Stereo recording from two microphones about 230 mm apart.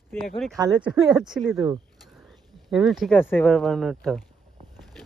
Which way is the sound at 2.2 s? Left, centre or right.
Centre.